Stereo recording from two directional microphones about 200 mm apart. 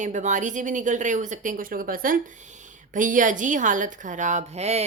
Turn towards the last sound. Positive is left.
turn(degrees=-30)  # may be behind; listen again after turning